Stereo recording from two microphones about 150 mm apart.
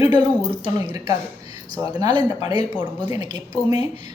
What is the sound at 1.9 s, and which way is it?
Speech, 30° right (ahead or behind).